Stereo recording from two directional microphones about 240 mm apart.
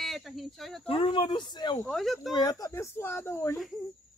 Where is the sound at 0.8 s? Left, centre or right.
Left.